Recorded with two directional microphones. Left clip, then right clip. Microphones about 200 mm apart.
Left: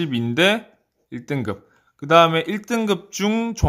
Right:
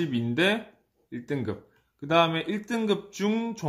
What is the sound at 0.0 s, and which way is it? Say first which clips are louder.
Speech: left 7 dB; 40° left (ahead or behind).